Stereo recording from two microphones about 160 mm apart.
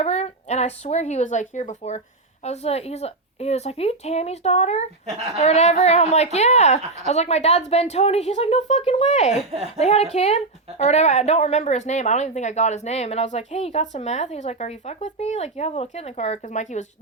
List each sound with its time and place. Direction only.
0.0 s a woman's voice: 40° left (ahead or behind)